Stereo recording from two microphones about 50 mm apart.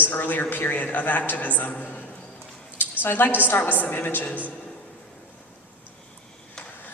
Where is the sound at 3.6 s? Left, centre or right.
Left.